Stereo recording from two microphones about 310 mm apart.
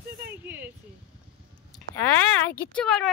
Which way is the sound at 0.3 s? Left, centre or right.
Centre.